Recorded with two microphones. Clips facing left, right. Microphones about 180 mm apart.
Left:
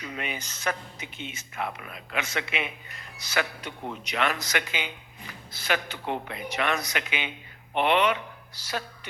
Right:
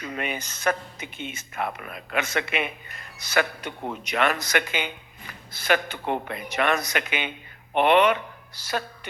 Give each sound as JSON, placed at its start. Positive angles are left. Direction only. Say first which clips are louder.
{"t": 0.0, "sound": "speech", "louder": "right 4 dB", "side_deg": -55}